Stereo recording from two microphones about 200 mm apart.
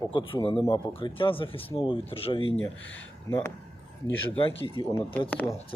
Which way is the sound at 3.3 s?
15° left (ahead or behind).